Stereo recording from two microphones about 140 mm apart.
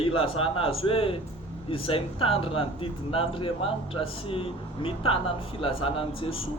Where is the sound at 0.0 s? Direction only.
40° left (ahead or behind).